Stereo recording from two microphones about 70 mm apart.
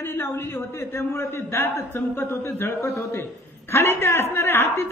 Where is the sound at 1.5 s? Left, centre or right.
Left.